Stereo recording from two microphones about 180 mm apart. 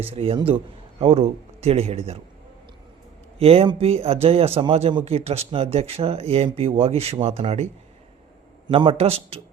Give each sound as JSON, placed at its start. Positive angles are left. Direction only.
{"t": 0.1, "sound": "a man's voice", "side_deg": -30}
{"t": 3.3, "sound": "a man's voice", "side_deg": -35}
{"t": 8.7, "sound": "a man's voice", "side_deg": -30}